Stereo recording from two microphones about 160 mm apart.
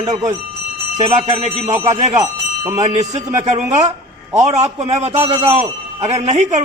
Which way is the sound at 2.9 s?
50° right (ahead or behind).